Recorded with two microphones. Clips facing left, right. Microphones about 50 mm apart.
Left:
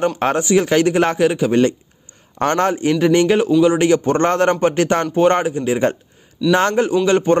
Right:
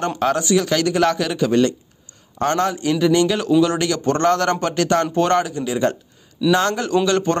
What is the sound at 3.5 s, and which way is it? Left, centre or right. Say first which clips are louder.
A man's voice: left 4 dB; centre.